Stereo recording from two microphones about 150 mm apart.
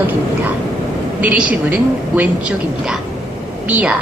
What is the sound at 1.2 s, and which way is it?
A woman's voice, 10° right (ahead or behind).